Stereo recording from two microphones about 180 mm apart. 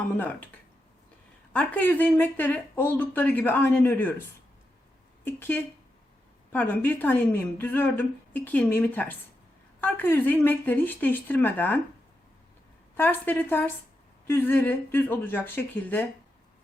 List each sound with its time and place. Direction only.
0.2 s a woman's voice: 10° left (ahead or behind)
1.5 s a woman's voice: 10° left (ahead or behind)
5.2 s a woman's voice: 10° left (ahead or behind)
13.0 s a woman's voice: 10° left (ahead or behind)